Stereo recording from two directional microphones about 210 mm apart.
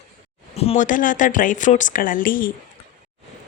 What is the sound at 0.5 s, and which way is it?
Speech, 30° left (ahead or behind).